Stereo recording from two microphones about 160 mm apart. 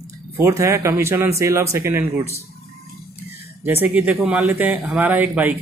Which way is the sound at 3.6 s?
10° right (ahead or behind).